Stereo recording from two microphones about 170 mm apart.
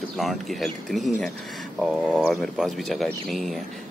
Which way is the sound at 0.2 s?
Centre (ahead or behind).